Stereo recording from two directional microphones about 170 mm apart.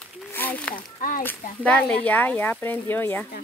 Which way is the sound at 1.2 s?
10° left (ahead or behind).